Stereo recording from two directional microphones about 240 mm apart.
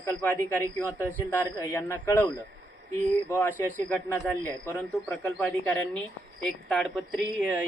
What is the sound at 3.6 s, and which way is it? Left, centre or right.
Speech, centre.